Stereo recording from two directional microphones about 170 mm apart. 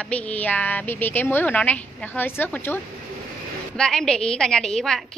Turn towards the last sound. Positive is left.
turn(degrees=5)  # may be behind; listen again after turning